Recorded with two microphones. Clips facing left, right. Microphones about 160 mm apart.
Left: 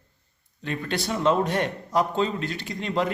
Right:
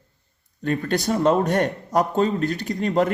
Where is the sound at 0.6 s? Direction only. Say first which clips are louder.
Right 6 dB; 45° right (ahead or behind).